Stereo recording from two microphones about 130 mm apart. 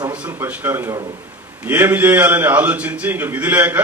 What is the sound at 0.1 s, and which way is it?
A man's voice, 15° right (ahead or behind).